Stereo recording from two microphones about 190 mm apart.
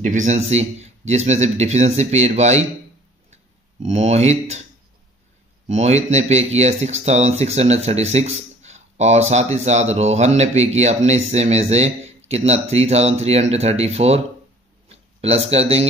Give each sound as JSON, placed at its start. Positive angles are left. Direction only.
{"t": 0.0, "sound": "speech", "side_deg": -40}
{"t": 3.8, "sound": "speech", "side_deg": -35}
{"t": 5.7, "sound": "speech", "side_deg": -35}